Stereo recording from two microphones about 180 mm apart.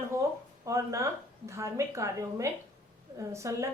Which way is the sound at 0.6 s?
20° right (ahead or behind).